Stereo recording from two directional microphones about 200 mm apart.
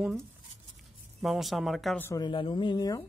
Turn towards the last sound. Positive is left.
turn(degrees=20)  # may be behind; listen again after turning